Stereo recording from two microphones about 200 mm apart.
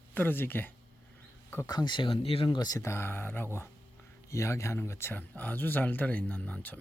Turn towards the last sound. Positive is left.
turn(degrees=5)  # may be behind; listen again after turning